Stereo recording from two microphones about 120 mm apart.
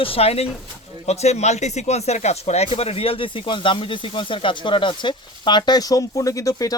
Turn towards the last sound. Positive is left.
turn(degrees=30)  # may be behind; listen again after turning